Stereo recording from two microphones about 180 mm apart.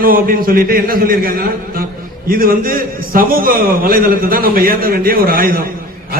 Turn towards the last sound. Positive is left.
turn(degrees=-55)  # may be behind; listen again after turning